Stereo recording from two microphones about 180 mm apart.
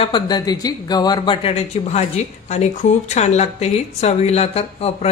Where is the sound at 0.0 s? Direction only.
25° left (ahead or behind).